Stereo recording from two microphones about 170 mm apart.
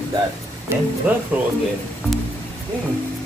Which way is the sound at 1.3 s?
10° right (ahead or behind).